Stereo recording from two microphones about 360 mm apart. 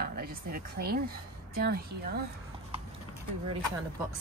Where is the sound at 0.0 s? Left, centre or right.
Right.